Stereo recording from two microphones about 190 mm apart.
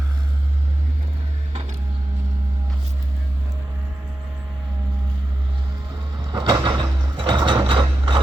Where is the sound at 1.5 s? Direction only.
30° right (ahead or behind).